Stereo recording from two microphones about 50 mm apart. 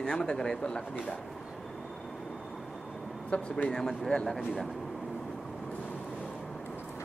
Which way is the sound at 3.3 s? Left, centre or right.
Left.